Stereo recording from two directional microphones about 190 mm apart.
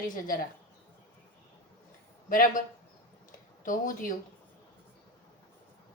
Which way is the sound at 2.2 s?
45° left (ahead or behind).